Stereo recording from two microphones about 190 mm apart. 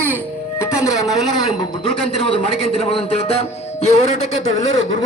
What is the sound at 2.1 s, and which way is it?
Speech, 30° left (ahead or behind).